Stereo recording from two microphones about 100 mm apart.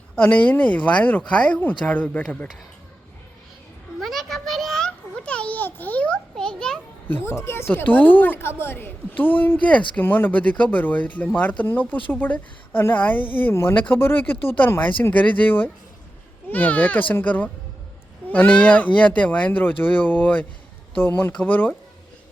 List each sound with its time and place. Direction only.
0.2 s speech: 15° left (ahead or behind)
4.0 s a sound: centre (ahead or behind)
7.1 s a woman's voice: 25° left (ahead or behind)